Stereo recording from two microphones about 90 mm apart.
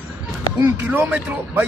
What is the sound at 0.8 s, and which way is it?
Speech, 20° right (ahead or behind).